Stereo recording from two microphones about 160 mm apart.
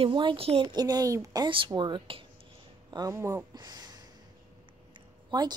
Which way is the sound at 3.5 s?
25° right (ahead or behind).